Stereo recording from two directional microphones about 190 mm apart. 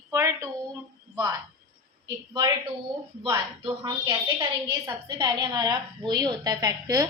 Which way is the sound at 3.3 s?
15° right (ahead or behind).